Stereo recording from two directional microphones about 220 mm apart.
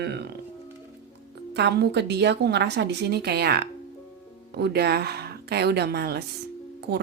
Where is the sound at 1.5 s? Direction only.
50° right (ahead or behind).